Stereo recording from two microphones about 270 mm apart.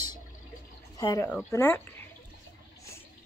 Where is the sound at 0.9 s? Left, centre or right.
Centre.